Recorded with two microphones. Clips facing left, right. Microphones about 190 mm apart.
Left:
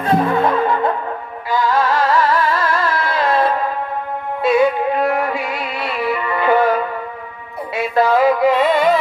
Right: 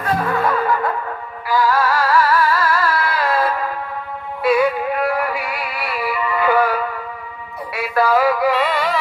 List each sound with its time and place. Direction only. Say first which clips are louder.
0.0 s music: left 4 dB; 25° left (ahead or behind)